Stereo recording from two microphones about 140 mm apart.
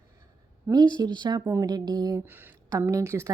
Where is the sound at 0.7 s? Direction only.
30° right (ahead or behind).